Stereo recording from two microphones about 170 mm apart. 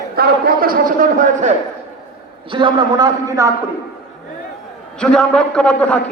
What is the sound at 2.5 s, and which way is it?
A man's voice, 25° right (ahead or behind).